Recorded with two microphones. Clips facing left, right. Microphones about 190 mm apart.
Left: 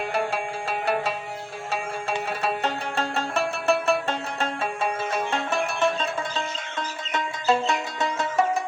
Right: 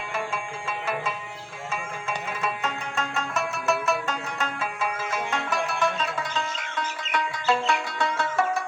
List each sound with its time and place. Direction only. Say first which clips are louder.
0.7 s music: left 5 dB; 65° left (ahead or behind)
1.7 s music: left 4 dB; 35° left (ahead or behind); by 8.4 s 20° left (ahead or behind)